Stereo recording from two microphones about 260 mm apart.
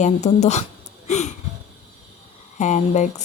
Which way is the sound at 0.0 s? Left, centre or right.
Left.